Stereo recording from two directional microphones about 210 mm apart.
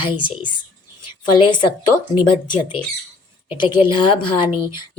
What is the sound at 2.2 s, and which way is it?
Speech, 20° left (ahead or behind).